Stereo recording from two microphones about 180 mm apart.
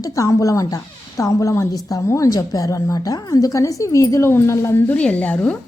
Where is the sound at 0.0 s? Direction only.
20° left (ahead or behind).